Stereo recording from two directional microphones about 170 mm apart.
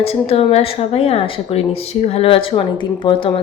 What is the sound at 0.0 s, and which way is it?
Speech, 35° left (ahead or behind).